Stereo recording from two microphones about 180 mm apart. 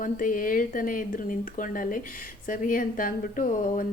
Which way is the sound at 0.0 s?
50° left (ahead or behind).